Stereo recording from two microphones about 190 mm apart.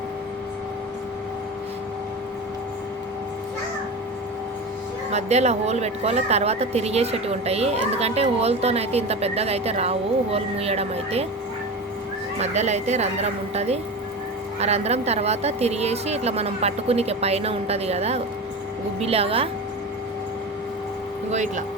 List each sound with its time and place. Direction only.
5.1 s a woman's voice: 35° right (ahead or behind)
12.4 s a woman's voice: 35° right (ahead or behind)
21.2 s a woman's voice: 40° right (ahead or behind)